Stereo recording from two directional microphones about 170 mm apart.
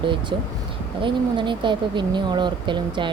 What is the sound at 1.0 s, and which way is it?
Speech, 30° right (ahead or behind).